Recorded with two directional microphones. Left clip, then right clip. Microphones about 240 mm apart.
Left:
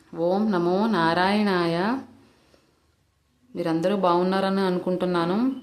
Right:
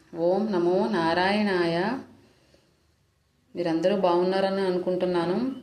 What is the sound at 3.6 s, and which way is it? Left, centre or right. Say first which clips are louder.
Speech: even; centre.